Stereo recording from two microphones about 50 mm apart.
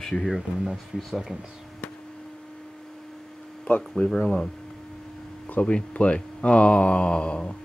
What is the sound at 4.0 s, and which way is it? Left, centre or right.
Speech, centre.